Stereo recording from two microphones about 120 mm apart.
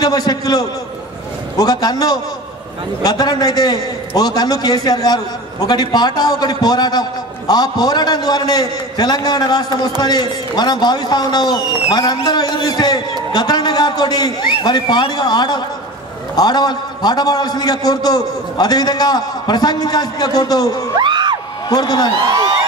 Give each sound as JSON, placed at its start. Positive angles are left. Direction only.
{"t": 0.0, "sound": "a man's voice", "side_deg": 35}
{"t": 20.9, "sound": "a sound", "side_deg": -40}
{"t": 21.6, "sound": "a man's voice", "side_deg": 35}